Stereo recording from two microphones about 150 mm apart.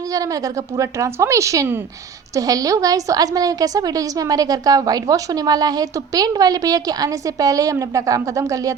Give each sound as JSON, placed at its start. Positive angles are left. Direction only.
{"t": 0.1, "sound": "a woman's voice", "side_deg": -25}